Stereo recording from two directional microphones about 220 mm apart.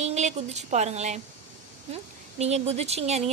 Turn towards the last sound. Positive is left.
turn(degrees=-30)  # may be behind; listen again after turning